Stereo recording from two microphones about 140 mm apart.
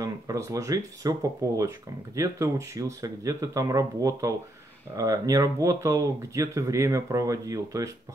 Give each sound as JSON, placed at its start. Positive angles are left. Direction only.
{"t": 0.0, "sound": "speech", "side_deg": -25}